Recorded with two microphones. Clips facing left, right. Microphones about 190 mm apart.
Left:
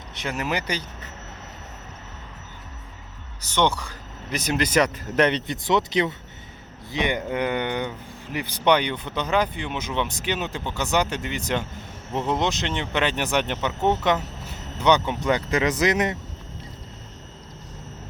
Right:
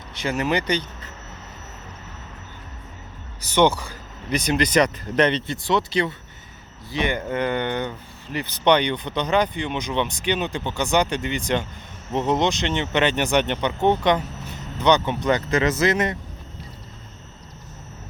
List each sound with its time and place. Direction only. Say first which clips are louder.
0.1 s speech: right 4 dB; centre (ahead or behind)
3.4 s speech: right 4 dB; 10° right (ahead or behind); by 16.1 s 15° left (ahead or behind)